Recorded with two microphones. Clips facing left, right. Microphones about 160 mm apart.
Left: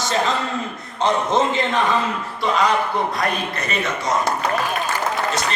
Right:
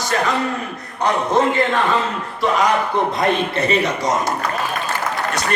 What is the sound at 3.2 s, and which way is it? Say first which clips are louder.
Speech: right 5 dB; 30° right (ahead or behind).